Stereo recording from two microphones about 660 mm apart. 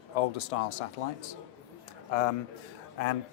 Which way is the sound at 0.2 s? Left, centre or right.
Left.